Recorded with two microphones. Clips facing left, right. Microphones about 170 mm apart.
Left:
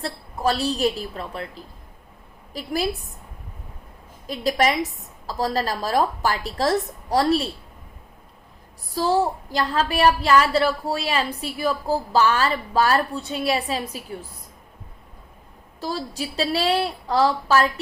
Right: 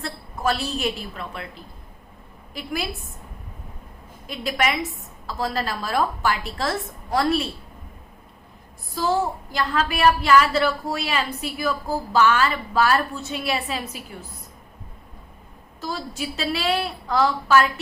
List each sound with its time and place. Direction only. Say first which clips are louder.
0.0 s a woman's voice: left 2 dB; 35° left (ahead or behind)
4.3 s a woman's voice: left 3 dB; 35° left (ahead or behind)
9.0 s a woman's voice: left 2 dB; 35° left (ahead or behind)
15.8 s a woman's voice: left 2 dB; 35° left (ahead or behind)